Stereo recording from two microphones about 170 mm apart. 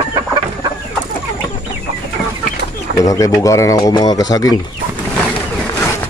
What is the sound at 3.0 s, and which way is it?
Speech, 20° left (ahead or behind).